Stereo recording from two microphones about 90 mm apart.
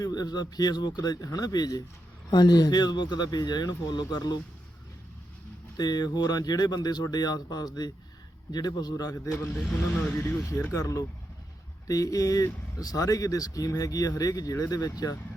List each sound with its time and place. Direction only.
0.0 s speech: 45° left (ahead or behind)
5.7 s speech: 45° left (ahead or behind)
9.1 s a man's voice: 25° left (ahead or behind)
9.7 s speech: 5° left (ahead or behind)
10.7 s speech: 35° left (ahead or behind)